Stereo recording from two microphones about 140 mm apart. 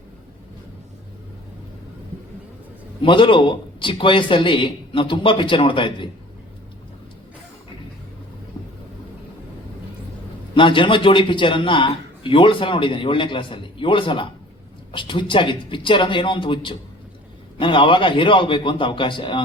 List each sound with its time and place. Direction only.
3.0 s a man's voice: 40° left (ahead or behind)
10.5 s a man's voice: 40° left (ahead or behind)